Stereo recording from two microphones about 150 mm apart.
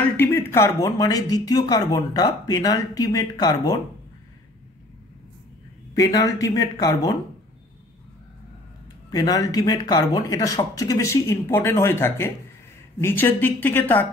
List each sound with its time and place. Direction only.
0.2 s speech: 15° left (ahead or behind)
5.9 s speech: 25° left (ahead or behind)
9.1 s speech: 25° left (ahead or behind)